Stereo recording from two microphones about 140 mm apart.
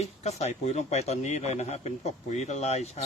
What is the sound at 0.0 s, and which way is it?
Speech, 50° left (ahead or behind).